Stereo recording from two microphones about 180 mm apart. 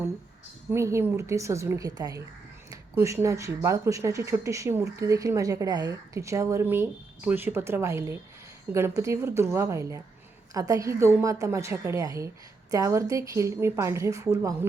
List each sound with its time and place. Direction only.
0.7 s speech: 15° right (ahead or behind)